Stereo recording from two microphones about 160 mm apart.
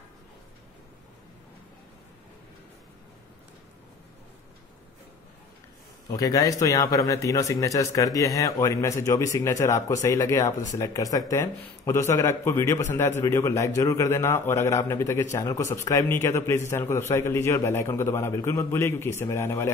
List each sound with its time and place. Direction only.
6.0 s a man's voice: 20° left (ahead or behind)